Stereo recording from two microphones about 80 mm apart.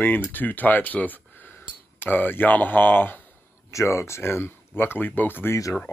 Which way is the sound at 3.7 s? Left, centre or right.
Left.